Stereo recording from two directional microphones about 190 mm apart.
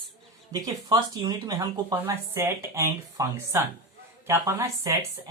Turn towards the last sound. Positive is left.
turn(degrees=-15)  # may be behind; listen again after turning